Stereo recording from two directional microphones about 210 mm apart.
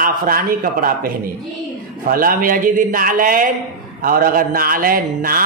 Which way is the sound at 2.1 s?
45° right (ahead or behind).